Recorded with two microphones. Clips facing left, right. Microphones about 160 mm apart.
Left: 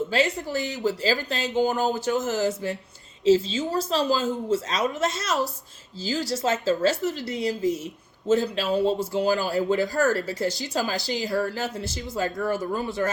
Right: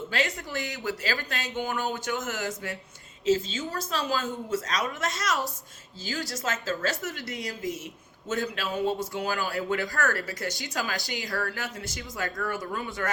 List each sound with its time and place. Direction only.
0.1 s speech: 30° left (ahead or behind)
6.3 s speech: 30° left (ahead or behind)